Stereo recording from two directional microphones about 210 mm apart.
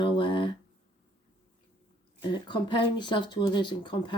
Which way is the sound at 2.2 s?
20° left (ahead or behind).